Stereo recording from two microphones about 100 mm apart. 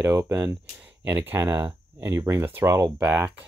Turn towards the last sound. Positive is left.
turn(degrees=-20)  # may be behind; listen again after turning